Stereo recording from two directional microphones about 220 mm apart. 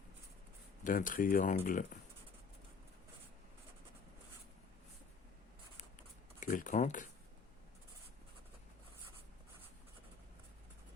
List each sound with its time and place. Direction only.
0.9 s speech: 40° left (ahead or behind)
6.4 s speech: 35° left (ahead or behind)